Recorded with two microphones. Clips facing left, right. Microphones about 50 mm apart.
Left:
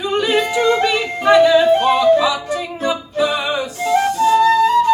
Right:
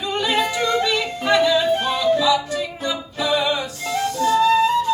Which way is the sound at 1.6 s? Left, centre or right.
Left.